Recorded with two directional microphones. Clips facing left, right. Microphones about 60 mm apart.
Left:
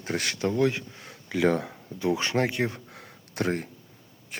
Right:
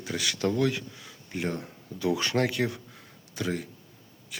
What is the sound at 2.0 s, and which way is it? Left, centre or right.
Speech, left.